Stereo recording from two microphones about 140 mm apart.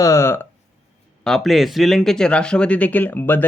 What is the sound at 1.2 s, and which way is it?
A man's voice, centre (ahead or behind).